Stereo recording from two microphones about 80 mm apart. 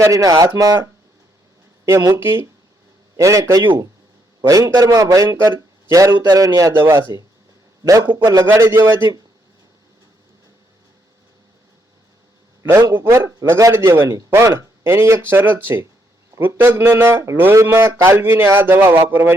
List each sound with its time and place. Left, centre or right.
0.0 s a man's voice: right
1.8 s speech: right
3.2 s a man's voice: right
6.8 s a man's voice: right
8.2 s a man's voice: right
8.4 s speech: right
12.9 s a man's voice: right